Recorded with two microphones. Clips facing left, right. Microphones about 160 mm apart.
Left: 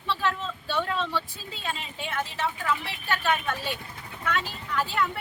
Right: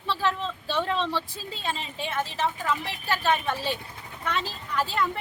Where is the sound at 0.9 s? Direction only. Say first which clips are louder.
Right 2 dB; 30° right (ahead or behind).